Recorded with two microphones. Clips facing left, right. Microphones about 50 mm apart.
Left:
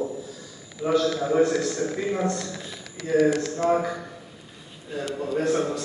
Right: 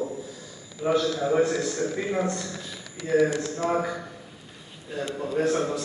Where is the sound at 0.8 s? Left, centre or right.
Right.